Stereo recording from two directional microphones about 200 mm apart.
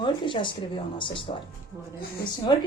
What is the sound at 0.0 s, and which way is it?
Speech, 25° left (ahead or behind).